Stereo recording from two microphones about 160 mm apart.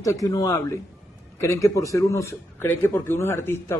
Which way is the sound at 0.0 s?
20° left (ahead or behind).